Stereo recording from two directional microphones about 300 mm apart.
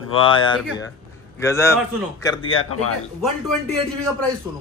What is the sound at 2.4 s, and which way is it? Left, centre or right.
Speech, left.